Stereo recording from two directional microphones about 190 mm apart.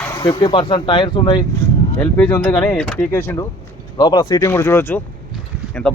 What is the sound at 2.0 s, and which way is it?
Speech, 10° left (ahead or behind).